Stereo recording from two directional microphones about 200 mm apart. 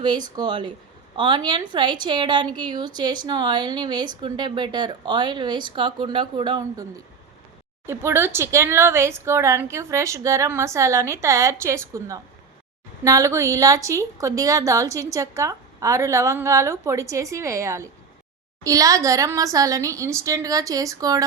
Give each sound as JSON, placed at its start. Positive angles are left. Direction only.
{"t": 0.3, "sound": "a woman's voice", "side_deg": -20}